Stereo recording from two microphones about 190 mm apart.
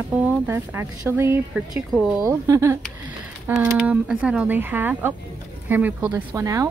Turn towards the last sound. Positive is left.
turn(degrees=-15)  # may be behind; listen again after turning